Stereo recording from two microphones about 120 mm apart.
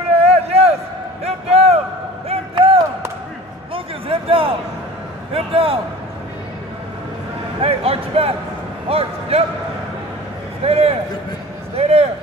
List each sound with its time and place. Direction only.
0.2 s a sound: 60° right (ahead or behind)
5.3 s a man's voice: 50° right (ahead or behind)
7.6 s a man's voice: 55° right (ahead or behind)
10.6 s speech: 55° right (ahead or behind)